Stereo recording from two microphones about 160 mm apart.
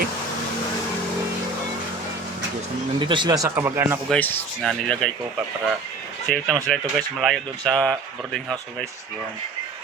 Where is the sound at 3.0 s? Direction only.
30° right (ahead or behind); by 4.0 s 15° right (ahead or behind).